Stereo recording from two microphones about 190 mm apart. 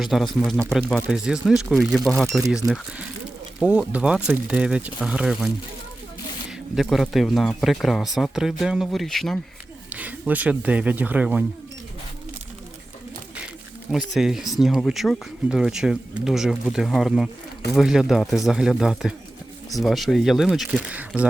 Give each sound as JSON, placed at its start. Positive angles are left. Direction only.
{"t": 0.0, "sound": "speech", "side_deg": 0}
{"t": 2.6, "sound": "speech", "side_deg": -20}
{"t": 3.6, "sound": "speech", "side_deg": -5}
{"t": 6.7, "sound": "speech", "side_deg": 0}
{"t": 14.1, "sound": "speech", "side_deg": 0}